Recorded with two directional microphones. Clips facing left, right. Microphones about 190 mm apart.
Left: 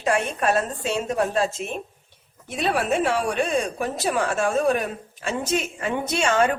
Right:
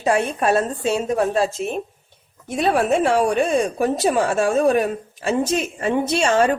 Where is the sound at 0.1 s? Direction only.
40° right (ahead or behind).